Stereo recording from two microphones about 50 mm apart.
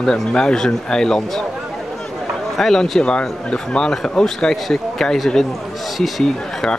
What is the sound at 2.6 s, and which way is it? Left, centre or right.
Speech, centre.